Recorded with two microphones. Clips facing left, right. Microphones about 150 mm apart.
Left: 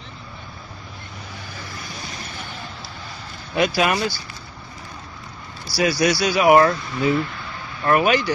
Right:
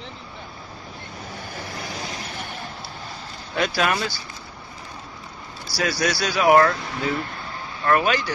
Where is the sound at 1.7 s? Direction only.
65° right (ahead or behind).